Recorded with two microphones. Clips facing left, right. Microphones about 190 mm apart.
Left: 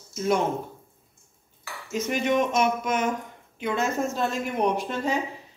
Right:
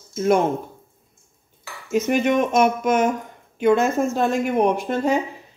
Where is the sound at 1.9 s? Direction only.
55° right (ahead or behind).